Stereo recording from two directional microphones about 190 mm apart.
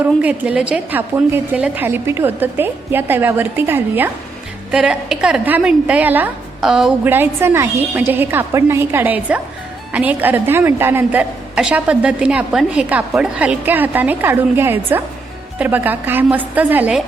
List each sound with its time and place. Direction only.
0.0 s a woman's voice: 5° right (ahead or behind)